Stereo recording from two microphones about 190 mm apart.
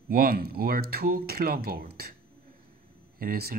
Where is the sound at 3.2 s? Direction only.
50° right (ahead or behind).